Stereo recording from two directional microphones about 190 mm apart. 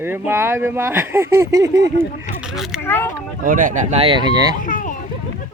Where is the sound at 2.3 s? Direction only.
5° right (ahead or behind).